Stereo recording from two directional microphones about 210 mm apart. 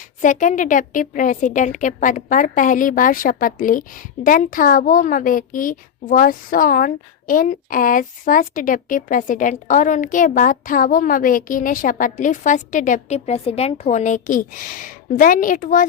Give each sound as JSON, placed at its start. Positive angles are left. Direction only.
{"t": 0.2, "sound": "a woman's voice", "side_deg": 35}